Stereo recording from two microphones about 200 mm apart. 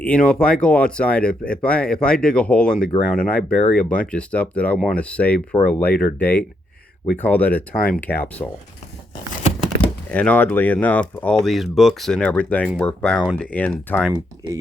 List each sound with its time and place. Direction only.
0.0 s speech: 5° left (ahead or behind)
9.6 s speech: 5° left (ahead or behind)
14.1 s speech: 20° right (ahead or behind)